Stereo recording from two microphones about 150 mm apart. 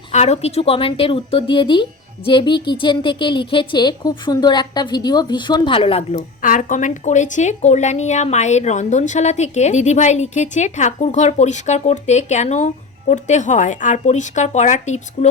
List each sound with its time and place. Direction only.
0.1 s a woman's voice: 45° left (ahead or behind)